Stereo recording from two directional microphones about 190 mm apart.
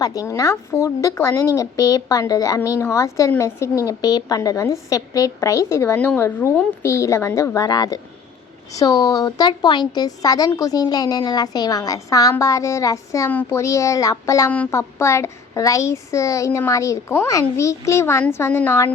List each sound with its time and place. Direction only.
0.0 s a woman's voice: 20° left (ahead or behind)